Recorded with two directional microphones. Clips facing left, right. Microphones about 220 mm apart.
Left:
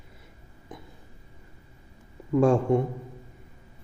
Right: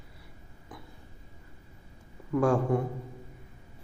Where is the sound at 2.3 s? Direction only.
25° left (ahead or behind).